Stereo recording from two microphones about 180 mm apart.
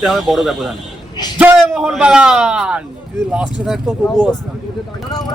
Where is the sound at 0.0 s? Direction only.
Centre (ahead or behind).